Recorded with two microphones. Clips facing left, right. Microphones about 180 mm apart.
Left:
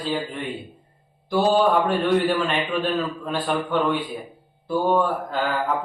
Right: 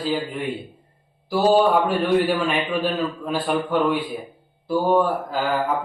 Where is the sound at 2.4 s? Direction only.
5° right (ahead or behind).